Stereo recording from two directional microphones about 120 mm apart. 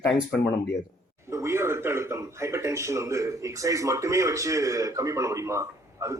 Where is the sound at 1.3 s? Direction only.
25° right (ahead or behind).